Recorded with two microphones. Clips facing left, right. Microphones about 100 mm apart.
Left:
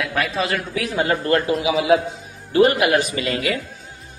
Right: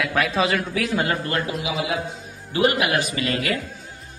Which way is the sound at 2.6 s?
30° left (ahead or behind).